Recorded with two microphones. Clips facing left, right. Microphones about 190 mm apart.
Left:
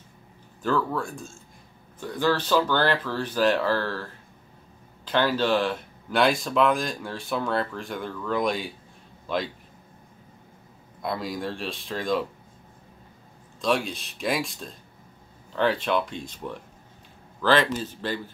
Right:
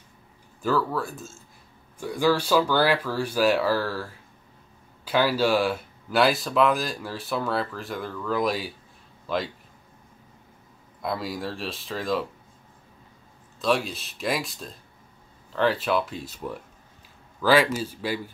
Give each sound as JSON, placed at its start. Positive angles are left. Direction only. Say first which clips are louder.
{"t": 0.6, "sound": "speech", "louder": "right 1 dB", "side_deg": -5}
{"t": 11.0, "sound": "speech", "louder": "even", "side_deg": 0}
{"t": 13.6, "sound": "speech", "louder": "right 1 dB", "side_deg": 0}